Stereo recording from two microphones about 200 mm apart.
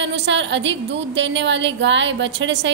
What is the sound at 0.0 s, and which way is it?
A woman's voice, 65° right (ahead or behind).